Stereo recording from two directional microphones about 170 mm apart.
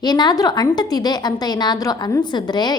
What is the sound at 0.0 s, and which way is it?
A woman's voice, 25° left (ahead or behind).